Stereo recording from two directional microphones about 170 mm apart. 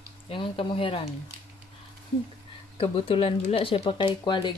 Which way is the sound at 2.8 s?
35° left (ahead or behind).